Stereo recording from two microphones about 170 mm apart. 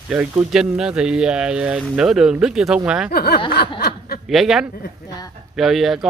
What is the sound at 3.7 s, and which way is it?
Snicker, 65° left (ahead or behind).